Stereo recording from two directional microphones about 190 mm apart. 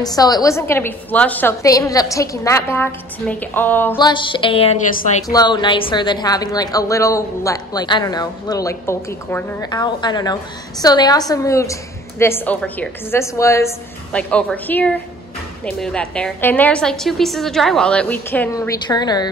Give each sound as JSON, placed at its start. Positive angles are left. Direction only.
{"t": 0.0, "sound": "a woman's voice", "side_deg": 20}
{"t": 4.0, "sound": "a woman's voice", "side_deg": 25}